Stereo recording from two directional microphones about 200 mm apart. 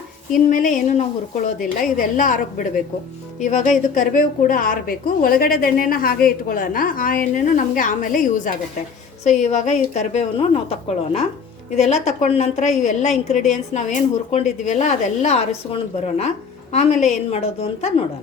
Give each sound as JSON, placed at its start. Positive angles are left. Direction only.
{"t": 0.3, "sound": "a woman's voice", "side_deg": 40}
{"t": 9.4, "sound": "a woman's voice", "side_deg": 35}